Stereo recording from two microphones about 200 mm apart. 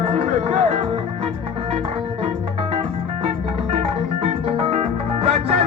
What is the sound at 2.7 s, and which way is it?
Music, 30° right (ahead or behind).